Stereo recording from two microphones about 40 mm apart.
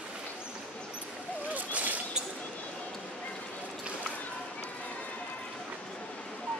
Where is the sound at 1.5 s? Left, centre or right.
Right.